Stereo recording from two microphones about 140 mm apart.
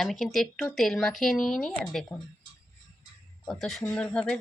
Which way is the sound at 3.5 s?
Centre (ahead or behind).